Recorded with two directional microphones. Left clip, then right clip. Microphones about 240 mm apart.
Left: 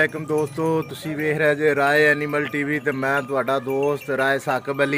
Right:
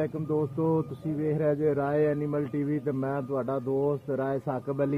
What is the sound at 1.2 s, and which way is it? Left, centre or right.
Speech, centre.